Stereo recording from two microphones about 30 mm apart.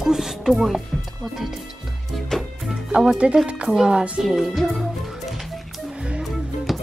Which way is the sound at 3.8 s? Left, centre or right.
Right.